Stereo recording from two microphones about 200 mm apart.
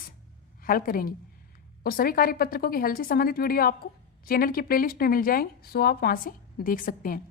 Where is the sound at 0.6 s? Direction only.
45° left (ahead or behind).